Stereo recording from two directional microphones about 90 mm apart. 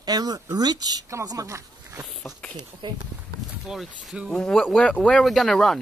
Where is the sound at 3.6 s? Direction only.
Centre (ahead or behind).